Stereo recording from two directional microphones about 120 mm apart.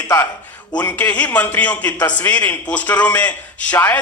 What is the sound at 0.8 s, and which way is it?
A man's voice, 15° left (ahead or behind).